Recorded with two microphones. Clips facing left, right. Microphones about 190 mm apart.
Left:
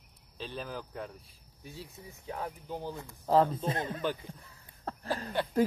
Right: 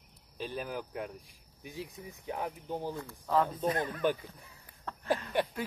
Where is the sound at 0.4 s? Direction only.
10° right (ahead or behind).